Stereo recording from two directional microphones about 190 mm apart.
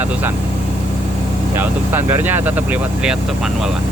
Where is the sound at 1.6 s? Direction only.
10° right (ahead or behind).